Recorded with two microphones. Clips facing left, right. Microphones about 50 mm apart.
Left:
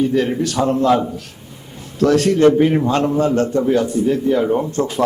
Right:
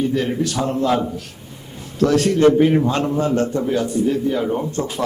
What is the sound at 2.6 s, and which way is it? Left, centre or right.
Speech, centre.